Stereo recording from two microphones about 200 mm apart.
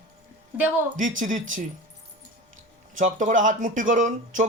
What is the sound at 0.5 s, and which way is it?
Speech, 10° right (ahead or behind).